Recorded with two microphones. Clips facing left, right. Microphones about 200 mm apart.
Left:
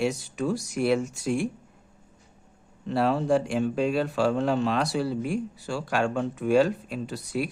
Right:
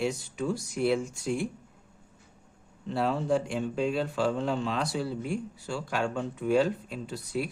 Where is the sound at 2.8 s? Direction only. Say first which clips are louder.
Left 4 dB; 70° left (ahead or behind).